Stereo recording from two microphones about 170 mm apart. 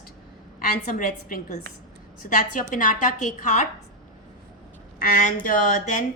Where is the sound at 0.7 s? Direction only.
50° left (ahead or behind).